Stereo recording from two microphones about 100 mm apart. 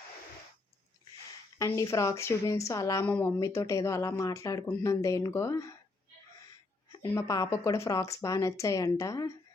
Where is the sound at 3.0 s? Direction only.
25° left (ahead or behind).